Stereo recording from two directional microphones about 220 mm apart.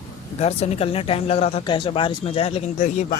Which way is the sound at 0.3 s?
30° left (ahead or behind).